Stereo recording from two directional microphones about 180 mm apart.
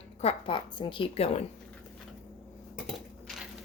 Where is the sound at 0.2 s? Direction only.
30° left (ahead or behind).